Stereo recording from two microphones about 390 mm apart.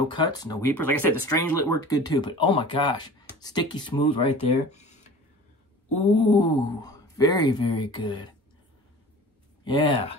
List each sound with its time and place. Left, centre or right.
0.1 s speech: centre
0.6 s speech: left
0.8 s speech: centre
1.1 s speech: left
1.8 s speech: centre
6.1 s speech: centre
9.7 s speech: centre